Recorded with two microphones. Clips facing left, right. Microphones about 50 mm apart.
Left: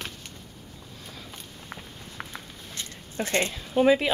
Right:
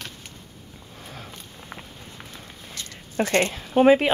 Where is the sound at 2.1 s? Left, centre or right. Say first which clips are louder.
Left 2 dB; left.